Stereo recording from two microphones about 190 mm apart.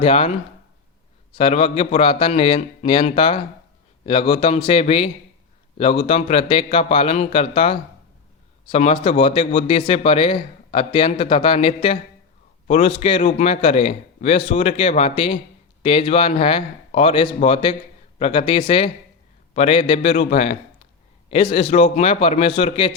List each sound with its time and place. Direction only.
0.0 s a man's voice: 30° left (ahead or behind)